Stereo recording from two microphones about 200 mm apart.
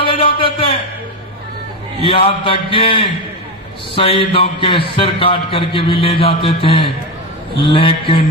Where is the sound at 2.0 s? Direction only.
25° left (ahead or behind).